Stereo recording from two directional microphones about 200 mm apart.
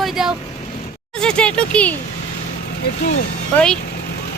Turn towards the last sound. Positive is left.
turn(degrees=5)  # may be behind; listen again after turning